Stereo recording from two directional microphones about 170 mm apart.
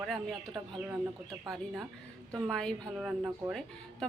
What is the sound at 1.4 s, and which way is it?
Speech, centre (ahead or behind).